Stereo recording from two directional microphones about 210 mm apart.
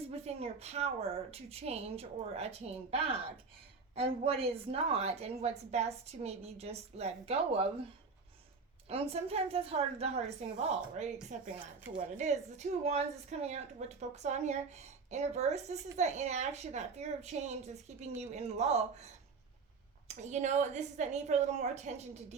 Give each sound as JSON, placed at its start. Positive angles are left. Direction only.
{"t": 0.1, "sound": "a woman's voice", "side_deg": -30}
{"t": 8.9, "sound": "a woman's voice", "side_deg": -30}